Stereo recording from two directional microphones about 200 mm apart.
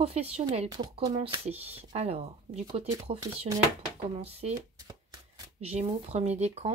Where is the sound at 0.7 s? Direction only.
20° right (ahead or behind).